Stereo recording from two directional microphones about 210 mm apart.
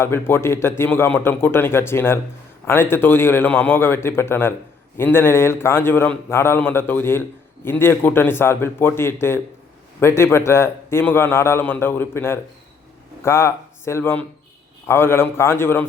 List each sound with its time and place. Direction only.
0.0 s a man's voice: 10° left (ahead or behind)